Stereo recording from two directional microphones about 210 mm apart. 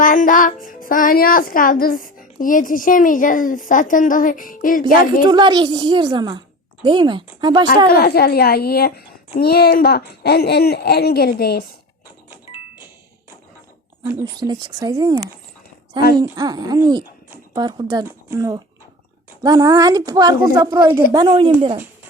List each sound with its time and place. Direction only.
0.0 s speech: 40° left (ahead or behind)
5.2 s a woman's voice: 20° right (ahead or behind)
7.9 s a child's voice: 45° left (ahead or behind)
12.3 s doorbell: 10° right (ahead or behind)
14.1 s speech: 15° right (ahead or behind)
16.2 s a woman's voice: 20° right (ahead or behind)